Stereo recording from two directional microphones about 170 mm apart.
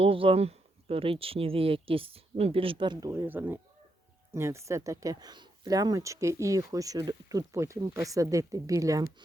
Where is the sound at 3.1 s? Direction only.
15° right (ahead or behind).